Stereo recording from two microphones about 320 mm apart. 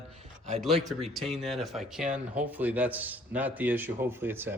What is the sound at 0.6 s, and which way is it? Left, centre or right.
A man's voice, centre.